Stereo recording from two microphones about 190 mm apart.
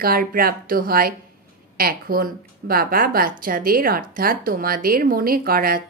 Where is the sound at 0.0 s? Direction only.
50° right (ahead or behind).